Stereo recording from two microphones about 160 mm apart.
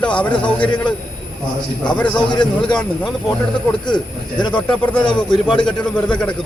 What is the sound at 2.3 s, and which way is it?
Speech, 30° left (ahead or behind).